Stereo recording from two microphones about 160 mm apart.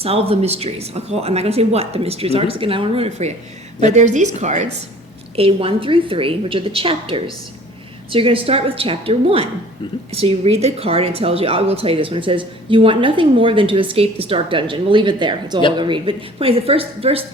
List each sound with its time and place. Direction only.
0.0 s a woman's voice: 40° right (ahead or behind)
5.4 s a woman's voice: 35° right (ahead or behind)